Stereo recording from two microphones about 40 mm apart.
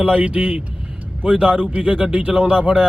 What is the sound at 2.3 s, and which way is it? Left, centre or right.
Speech, right.